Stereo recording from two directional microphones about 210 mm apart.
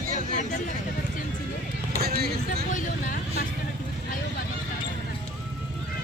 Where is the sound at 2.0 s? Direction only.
50° right (ahead or behind).